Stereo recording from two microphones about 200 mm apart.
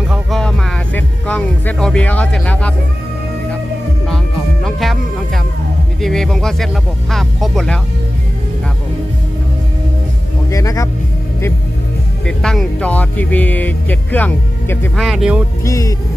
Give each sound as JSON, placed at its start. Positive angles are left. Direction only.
{"t": 0.1, "sound": "music", "side_deg": 0}
{"t": 4.6, "sound": "music", "side_deg": 0}
{"t": 5.9, "sound": "speech", "side_deg": 0}
{"t": 10.5, "sound": "speech", "side_deg": 15}
{"t": 12.3, "sound": "speech", "side_deg": 5}
{"t": 15.0, "sound": "speech", "side_deg": -5}
{"t": 15.6, "sound": "music", "side_deg": 15}